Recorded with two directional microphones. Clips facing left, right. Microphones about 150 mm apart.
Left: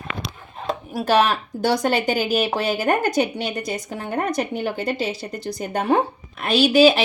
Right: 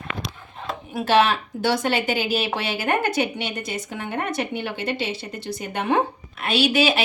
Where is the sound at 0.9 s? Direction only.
40° left (ahead or behind).